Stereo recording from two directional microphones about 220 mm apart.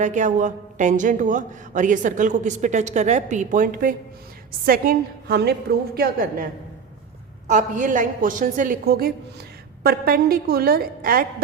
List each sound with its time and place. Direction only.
0.0 s a woman's voice: 35° right (ahead or behind)